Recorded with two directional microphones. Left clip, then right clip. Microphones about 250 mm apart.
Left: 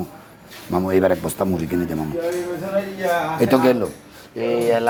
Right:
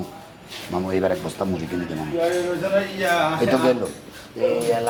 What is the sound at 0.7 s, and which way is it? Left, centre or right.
Speech, left.